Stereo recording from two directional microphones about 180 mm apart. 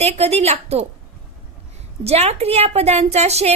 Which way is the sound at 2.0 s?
35° right (ahead or behind).